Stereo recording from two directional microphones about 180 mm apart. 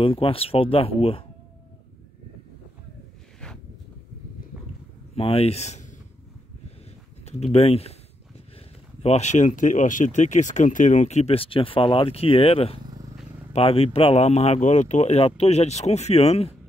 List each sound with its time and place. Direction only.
0.0 s speech: 30° left (ahead or behind)
5.1 s speech: 30° left (ahead or behind)
7.2 s speech: 35° left (ahead or behind)
9.0 s speech: 40° left (ahead or behind)